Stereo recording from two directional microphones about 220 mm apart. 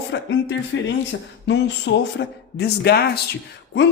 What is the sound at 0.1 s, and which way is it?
A man's voice, 55° left (ahead or behind).